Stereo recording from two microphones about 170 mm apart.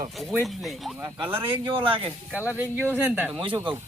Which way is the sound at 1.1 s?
30° right (ahead or behind).